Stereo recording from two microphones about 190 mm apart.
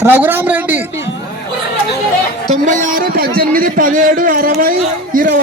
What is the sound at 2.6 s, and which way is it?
A man's voice, 45° right (ahead or behind).